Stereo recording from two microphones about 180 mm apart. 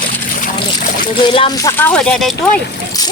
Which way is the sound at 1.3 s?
30° left (ahead or behind).